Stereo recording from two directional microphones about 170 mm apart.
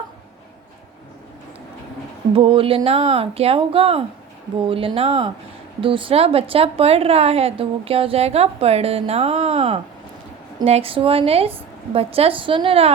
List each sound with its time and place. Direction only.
2.3 s a woman's voice: 30° right (ahead or behind)